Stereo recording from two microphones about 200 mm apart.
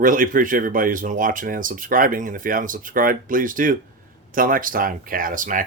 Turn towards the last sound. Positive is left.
turn(degrees=-40)  # may be behind; listen again after turning